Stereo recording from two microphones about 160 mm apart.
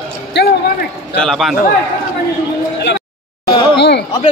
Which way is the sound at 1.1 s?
5° left (ahead or behind).